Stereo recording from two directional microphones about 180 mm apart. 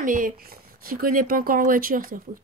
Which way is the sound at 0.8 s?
50° right (ahead or behind).